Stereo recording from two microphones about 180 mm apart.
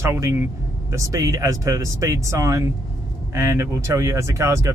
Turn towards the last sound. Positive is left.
turn(degrees=-15)  # may be behind; listen again after turning